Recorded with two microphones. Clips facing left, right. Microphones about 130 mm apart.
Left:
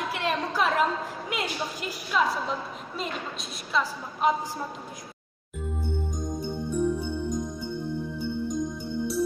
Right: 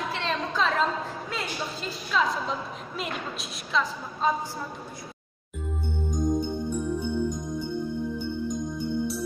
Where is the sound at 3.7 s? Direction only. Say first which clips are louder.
Even; 10° left (ahead or behind).